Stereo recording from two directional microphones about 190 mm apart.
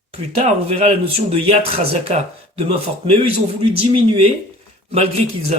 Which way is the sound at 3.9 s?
30° right (ahead or behind).